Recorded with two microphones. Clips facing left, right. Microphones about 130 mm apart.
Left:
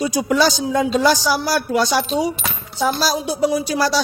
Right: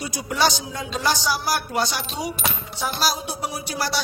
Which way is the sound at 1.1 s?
90° left.